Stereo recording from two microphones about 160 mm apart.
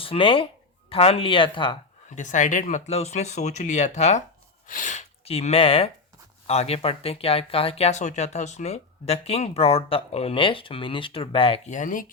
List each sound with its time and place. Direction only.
0.0 s speech: 35° left (ahead or behind)
2.0 s speech: 50° left (ahead or behind)